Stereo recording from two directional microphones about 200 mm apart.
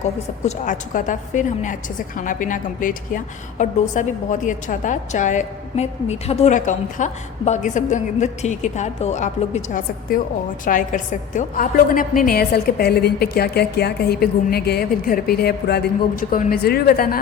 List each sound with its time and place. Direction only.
0.4 s a woman's voice: 40° left (ahead or behind)